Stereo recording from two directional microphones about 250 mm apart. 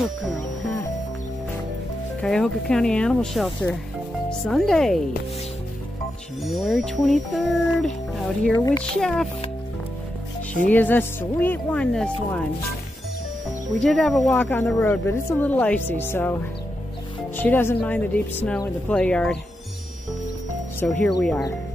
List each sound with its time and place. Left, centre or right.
0.0 s speech: centre
2.2 s speech: centre
6.4 s speech: centre
10.7 s speech: centre
13.7 s speech: centre
17.4 s speech: centre
20.8 s speech: centre